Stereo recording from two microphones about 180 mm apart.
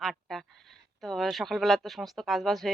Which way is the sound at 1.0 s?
Centre (ahead or behind).